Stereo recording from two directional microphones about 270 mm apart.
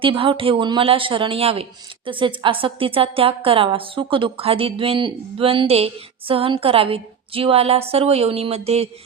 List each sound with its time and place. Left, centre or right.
0.0 s a woman's voice: centre